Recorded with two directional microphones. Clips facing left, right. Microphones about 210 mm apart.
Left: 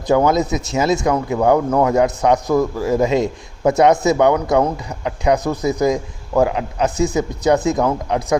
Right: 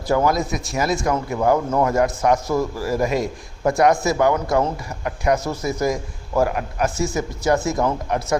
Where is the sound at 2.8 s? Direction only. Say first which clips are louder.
Left 5 dB; 20° left (ahead or behind).